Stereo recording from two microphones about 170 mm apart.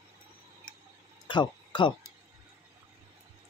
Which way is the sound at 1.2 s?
25° left (ahead or behind).